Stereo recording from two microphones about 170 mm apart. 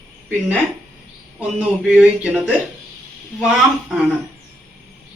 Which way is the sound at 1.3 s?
5° right (ahead or behind).